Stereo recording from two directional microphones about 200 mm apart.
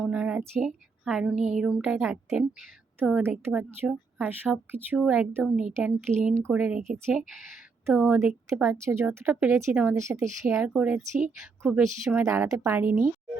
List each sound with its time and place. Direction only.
0.0 s a sound: 5° right (ahead or behind)
1.8 s a woman's voice: 5° right (ahead or behind)
8.4 s a woman's voice: 10° right (ahead or behind)